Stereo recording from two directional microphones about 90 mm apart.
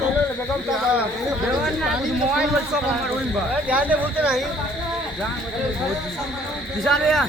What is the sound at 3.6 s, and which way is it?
Speech, 15° right (ahead or behind).